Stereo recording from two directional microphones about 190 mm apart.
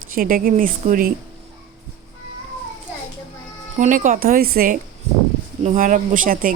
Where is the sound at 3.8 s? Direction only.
40° right (ahead or behind).